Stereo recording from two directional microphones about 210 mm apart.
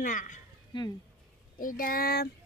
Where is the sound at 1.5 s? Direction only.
40° left (ahead or behind).